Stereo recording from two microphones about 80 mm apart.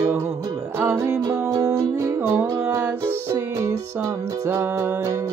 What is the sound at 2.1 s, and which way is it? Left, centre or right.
Music, right.